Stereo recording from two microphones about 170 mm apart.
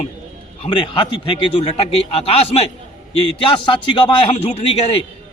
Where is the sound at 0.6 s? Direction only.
30° left (ahead or behind).